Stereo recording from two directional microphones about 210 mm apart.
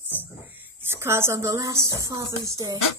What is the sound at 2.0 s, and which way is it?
Speech, 15° right (ahead or behind).